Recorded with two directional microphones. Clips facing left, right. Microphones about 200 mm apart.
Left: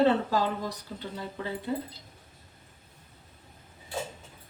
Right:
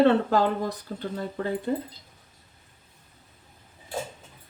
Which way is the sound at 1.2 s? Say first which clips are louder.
Right 6 dB; 50° right (ahead or behind).